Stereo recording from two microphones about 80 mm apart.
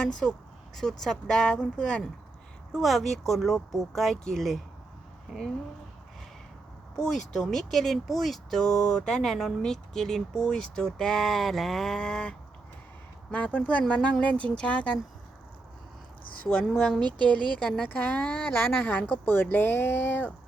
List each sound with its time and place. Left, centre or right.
0.2 s speech: centre
6.9 s speech: centre
16.4 s speech: centre